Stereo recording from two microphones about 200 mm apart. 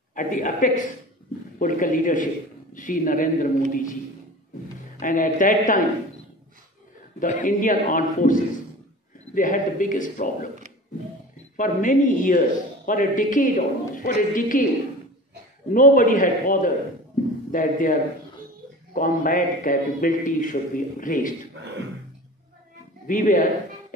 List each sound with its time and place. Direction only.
0.1 s a man's voice: 40° left (ahead or behind)
5.0 s speech: 40° left (ahead or behind)
7.2 s speech: 40° left (ahead or behind)
11.5 s speech: 40° left (ahead or behind)
15.7 s a man's voice: 45° left (ahead or behind)
18.9 s a man's voice: 45° left (ahead or behind)
23.0 s speech: 40° left (ahead or behind)